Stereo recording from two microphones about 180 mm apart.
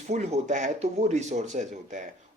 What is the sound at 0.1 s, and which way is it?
Speech, 40° right (ahead or behind).